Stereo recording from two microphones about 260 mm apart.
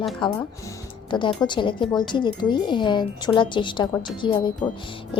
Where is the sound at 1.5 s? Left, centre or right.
Centre.